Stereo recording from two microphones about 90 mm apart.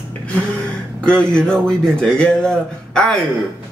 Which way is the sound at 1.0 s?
10° left (ahead or behind).